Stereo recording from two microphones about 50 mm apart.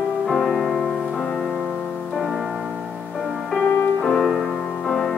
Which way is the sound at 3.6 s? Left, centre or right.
Centre.